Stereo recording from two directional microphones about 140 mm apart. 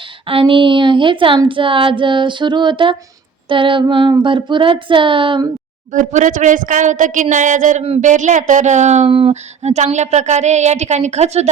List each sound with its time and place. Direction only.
0.3 s speech: 40° right (ahead or behind)
5.9 s speech: 60° right (ahead or behind)
9.0 s a sound: 40° right (ahead or behind)